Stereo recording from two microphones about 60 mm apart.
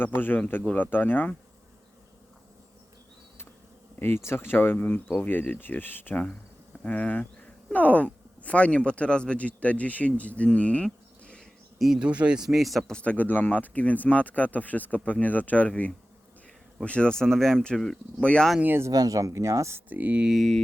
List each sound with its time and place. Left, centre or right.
0.0 s speech: left
4.0 s speech: left
6.8 s speech: left
11.9 s speech: centre
12.5 s speech: centre
12.9 s speech: left
18.9 s speech: right
19.9 s speech: right
20.2 s speech: centre